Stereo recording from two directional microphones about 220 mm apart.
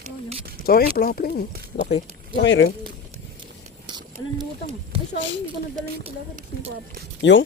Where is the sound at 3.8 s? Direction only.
20° right (ahead or behind).